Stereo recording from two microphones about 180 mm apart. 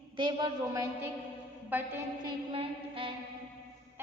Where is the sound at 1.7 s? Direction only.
10° right (ahead or behind).